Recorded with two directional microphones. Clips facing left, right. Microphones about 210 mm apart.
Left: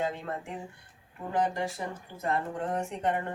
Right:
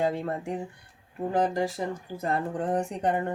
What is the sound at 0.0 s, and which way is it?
Speech, 35° right (ahead or behind).